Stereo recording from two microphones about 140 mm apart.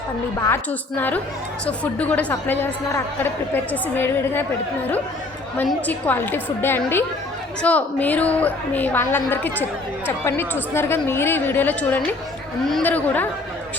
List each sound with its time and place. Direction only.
0.4 s a woman's voice: 15° left (ahead or behind)
5.8 s a woman's voice: 10° left (ahead or behind)